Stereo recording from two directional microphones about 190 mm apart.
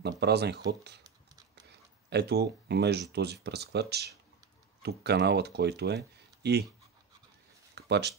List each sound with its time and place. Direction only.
0.0 s speech: 60° right (ahead or behind)
2.0 s speech: 60° right (ahead or behind)
7.7 s a sound: 60° right (ahead or behind)